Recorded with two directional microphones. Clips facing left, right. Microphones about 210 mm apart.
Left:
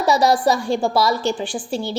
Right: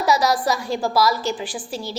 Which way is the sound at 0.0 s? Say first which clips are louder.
Left 3 dB; 30° left (ahead or behind).